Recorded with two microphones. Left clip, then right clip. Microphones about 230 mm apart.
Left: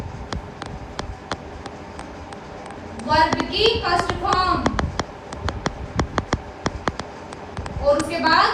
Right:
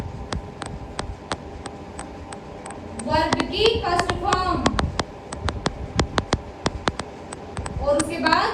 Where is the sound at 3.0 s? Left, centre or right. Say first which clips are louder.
Left 3 dB; left.